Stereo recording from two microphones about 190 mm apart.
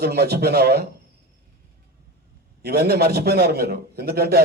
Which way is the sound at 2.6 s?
55° right (ahead or behind).